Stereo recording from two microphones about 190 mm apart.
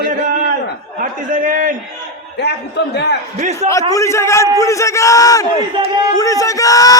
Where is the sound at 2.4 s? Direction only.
60° left (ahead or behind).